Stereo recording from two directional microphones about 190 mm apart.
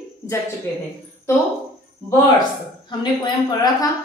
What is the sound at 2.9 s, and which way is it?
Speech, 25° left (ahead or behind).